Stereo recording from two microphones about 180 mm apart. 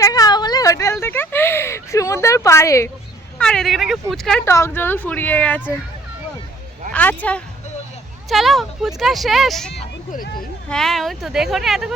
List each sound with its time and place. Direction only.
0.0 s a sound: 20° left (ahead or behind)
3.3 s speech: 5° left (ahead or behind)
4.4 s a woman's voice: 15° left (ahead or behind)
6.9 s a woman's voice: 10° left (ahead or behind)
10.1 s speech: 50° left (ahead or behind)
10.7 s speech: centre (ahead or behind)